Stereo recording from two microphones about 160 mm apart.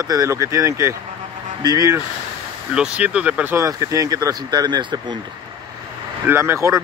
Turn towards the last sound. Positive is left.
turn(degrees=-20)  # may be behind; listen again after turning